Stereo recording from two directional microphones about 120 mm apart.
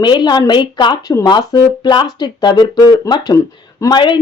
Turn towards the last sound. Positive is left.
turn(degrees=40)  # may be behind; listen again after turning